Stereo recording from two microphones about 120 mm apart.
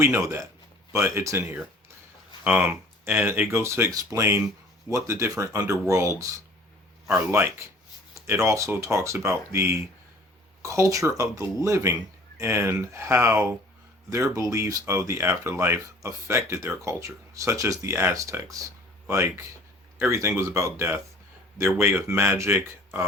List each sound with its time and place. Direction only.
0.0 s speech: 20° right (ahead or behind)
7.3 s speech: 20° right (ahead or behind)